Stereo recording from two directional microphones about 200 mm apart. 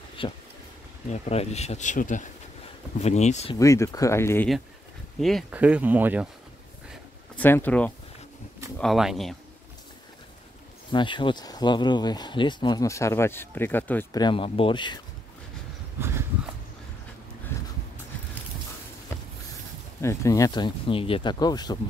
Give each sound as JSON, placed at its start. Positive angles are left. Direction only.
{"t": 0.2, "sound": "speech", "side_deg": 25}
{"t": 3.5, "sound": "speech", "side_deg": 15}
{"t": 5.2, "sound": "speech", "side_deg": -5}
{"t": 7.3, "sound": "speech", "side_deg": 10}
{"t": 10.9, "sound": "speech", "side_deg": 25}
{"t": 14.2, "sound": "speech", "side_deg": 25}
{"t": 16.0, "sound": "a sound", "side_deg": -10}
{"t": 20.0, "sound": "speech", "side_deg": 15}